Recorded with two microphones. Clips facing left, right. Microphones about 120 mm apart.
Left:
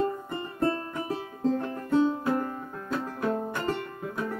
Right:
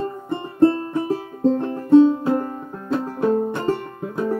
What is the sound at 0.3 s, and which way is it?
Music, 25° right (ahead or behind).